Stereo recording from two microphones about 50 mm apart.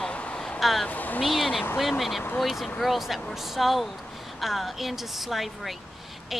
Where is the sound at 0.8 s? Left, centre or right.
Left.